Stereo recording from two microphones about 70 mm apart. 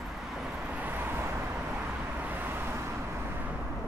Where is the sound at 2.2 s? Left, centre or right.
Right.